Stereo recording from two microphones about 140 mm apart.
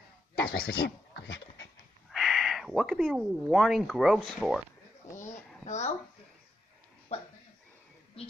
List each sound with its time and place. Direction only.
0.5 s speech: 90° left
2.0 s speech: centre (ahead or behind)
5.7 s speech: 55° left (ahead or behind)
7.1 s speech: 50° left (ahead or behind)